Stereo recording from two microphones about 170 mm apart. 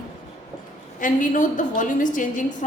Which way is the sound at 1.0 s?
50° left (ahead or behind).